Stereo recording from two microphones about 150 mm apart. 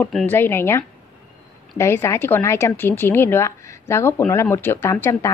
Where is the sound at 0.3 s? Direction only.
15° left (ahead or behind).